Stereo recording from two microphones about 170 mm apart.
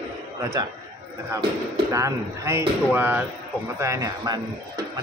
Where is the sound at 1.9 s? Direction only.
15° right (ahead or behind).